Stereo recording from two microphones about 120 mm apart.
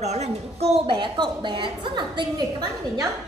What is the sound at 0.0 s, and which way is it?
Speech, 65° right (ahead or behind).